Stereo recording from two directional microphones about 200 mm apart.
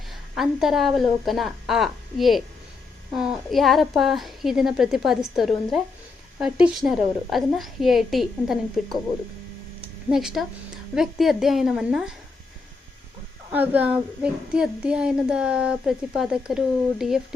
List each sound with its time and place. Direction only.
0.1 s speech: centre (ahead or behind)
3.5 s speech: centre (ahead or behind)
10.1 s speech: centre (ahead or behind)
13.5 s speech: 10° right (ahead or behind)